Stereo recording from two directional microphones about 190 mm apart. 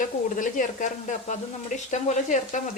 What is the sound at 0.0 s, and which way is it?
Speech, 45° left (ahead or behind).